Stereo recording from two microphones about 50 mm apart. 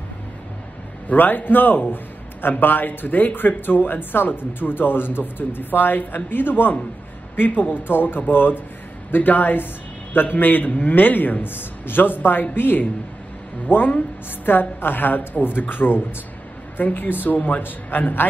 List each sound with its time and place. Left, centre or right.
1.0 s a woman's voice: left